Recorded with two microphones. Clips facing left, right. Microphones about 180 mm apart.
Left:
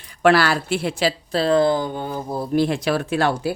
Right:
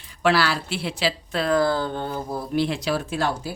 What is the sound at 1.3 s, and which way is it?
Speech, 30° left (ahead or behind).